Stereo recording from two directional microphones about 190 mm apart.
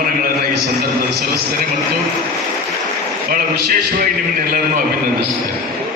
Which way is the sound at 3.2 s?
50° right (ahead or behind).